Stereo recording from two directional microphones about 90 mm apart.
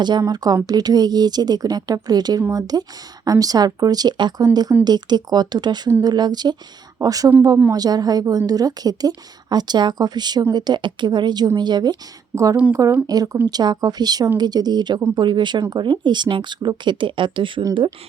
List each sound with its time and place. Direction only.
0.0 s speech: 50° right (ahead or behind)
7.0 s speech: 40° right (ahead or behind)
12.3 s a woman's voice: 40° right (ahead or behind)
13.1 s speech: 45° right (ahead or behind); by 17.6 s 65° right (ahead or behind)